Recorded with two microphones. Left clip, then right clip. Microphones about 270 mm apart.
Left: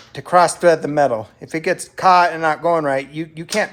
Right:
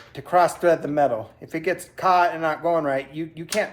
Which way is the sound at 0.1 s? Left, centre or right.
Left.